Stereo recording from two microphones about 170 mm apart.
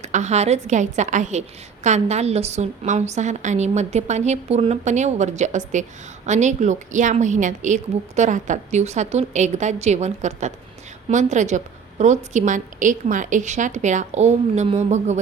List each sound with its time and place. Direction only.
0.0 s a woman's voice: 45° right (ahead or behind)